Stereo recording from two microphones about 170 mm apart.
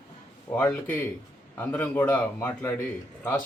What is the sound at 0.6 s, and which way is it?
Speech, 10° left (ahead or behind).